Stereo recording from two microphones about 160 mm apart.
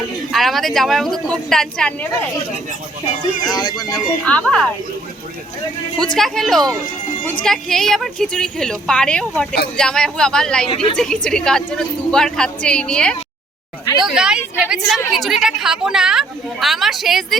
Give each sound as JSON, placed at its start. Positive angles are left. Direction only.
{"t": 0.3, "sound": "a woman's voice", "side_deg": 0}
{"t": 3.4, "sound": "speech", "side_deg": 25}
{"t": 4.3, "sound": "a woman's voice", "side_deg": 5}
{"t": 6.1, "sound": "a woman's voice", "side_deg": 0}
{"t": 14.0, "sound": "a woman's voice", "side_deg": -5}